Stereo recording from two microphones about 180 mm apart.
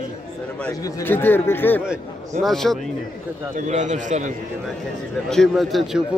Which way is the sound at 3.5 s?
40° right (ahead or behind).